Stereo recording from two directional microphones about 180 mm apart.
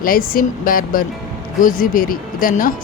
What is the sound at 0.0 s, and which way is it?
Speech, 50° left (ahead or behind).